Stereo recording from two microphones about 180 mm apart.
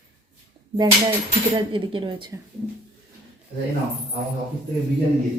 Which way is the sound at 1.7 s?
30° right (ahead or behind).